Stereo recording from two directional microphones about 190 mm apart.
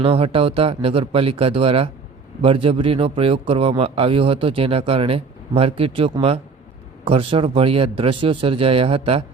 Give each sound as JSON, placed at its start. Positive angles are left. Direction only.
{"t": 0.0, "sound": "a man's voice", "side_deg": -30}